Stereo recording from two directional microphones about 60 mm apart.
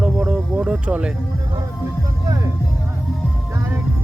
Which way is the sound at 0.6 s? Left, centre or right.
Centre.